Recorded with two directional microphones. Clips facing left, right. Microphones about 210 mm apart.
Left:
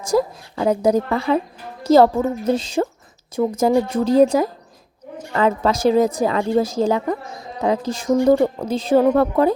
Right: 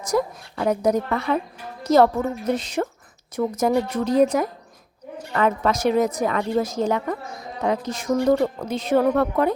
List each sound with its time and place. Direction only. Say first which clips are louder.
0.0 s a woman's voice: left 4 dB; 30° left (ahead or behind)